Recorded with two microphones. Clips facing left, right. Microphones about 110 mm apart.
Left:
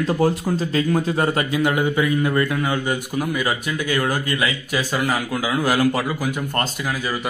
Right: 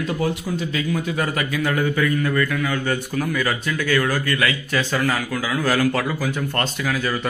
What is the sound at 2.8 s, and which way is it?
Speech, 15° left (ahead or behind).